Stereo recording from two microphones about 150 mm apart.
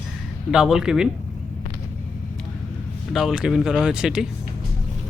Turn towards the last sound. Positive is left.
turn(degrees=-5)  # may be behind; listen again after turning